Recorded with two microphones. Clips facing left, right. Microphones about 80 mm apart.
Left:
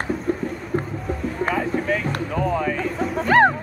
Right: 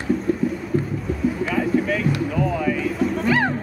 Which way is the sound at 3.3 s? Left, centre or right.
Left.